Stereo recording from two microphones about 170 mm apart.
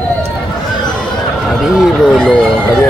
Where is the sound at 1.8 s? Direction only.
5° left (ahead or behind).